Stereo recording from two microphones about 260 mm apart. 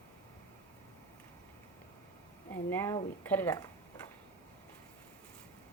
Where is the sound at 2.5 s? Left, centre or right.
Centre.